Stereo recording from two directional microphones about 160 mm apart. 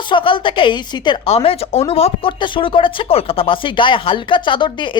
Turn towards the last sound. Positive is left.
turn(degrees=30)  # may be behind; listen again after turning